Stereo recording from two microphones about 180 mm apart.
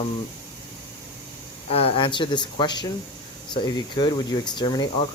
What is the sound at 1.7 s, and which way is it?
Speech, 30° left (ahead or behind).